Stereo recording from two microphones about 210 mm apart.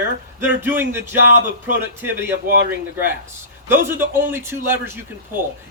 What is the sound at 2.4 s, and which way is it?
Speech, 40° right (ahead or behind).